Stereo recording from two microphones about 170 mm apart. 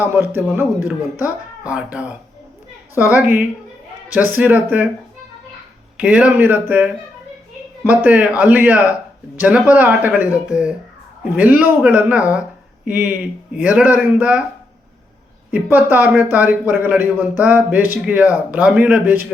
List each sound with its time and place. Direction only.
0.0 s speech: 15° right (ahead or behind)
6.0 s speech: 5° right (ahead or behind)
15.5 s speech: 10° right (ahead or behind)